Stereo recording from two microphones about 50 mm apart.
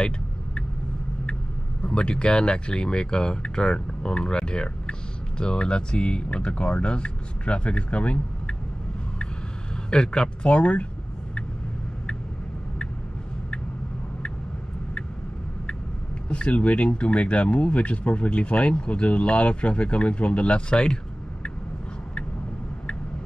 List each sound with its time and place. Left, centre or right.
1.8 s speech: left
9.8 s speech: centre
16.3 s speech: left